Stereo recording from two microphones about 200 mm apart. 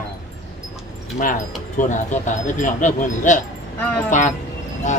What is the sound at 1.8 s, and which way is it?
Speech, 40° left (ahead or behind).